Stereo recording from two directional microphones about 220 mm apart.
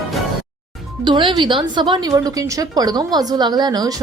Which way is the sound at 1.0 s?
20° right (ahead or behind).